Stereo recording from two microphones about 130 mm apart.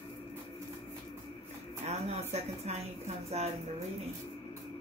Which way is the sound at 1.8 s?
55° right (ahead or behind).